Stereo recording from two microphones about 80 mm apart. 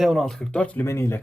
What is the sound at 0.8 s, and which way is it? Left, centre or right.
Speech, left.